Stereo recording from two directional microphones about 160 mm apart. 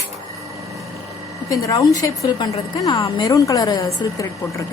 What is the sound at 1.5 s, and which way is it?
A woman's voice, 20° left (ahead or behind).